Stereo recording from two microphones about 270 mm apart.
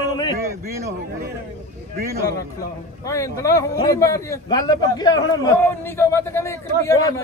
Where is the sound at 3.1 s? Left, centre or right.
Centre.